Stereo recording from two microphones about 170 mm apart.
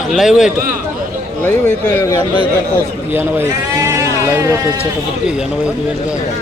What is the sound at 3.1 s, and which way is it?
A man's voice, 15° right (ahead or behind).